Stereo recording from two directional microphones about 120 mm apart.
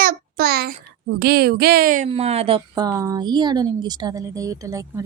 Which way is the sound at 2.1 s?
60° right (ahead or behind).